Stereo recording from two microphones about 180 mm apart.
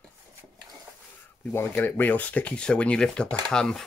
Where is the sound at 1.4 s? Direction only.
10° left (ahead or behind).